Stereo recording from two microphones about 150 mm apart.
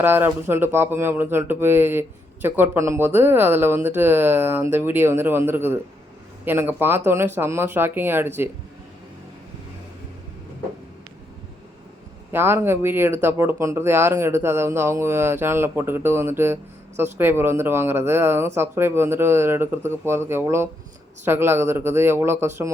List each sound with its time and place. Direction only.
0.0 s speech: 15° right (ahead or behind)
12.3 s speech: 15° right (ahead or behind)